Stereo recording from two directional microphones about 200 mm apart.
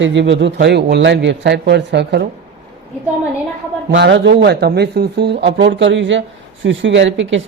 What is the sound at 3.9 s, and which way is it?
Speech, 60° right (ahead or behind).